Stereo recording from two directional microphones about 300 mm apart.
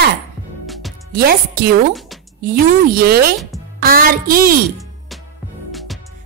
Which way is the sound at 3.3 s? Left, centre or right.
Centre.